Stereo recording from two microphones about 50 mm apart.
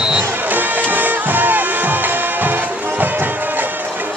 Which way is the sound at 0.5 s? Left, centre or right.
Right.